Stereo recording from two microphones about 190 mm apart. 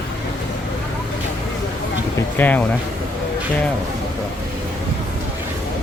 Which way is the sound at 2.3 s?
10° left (ahead or behind).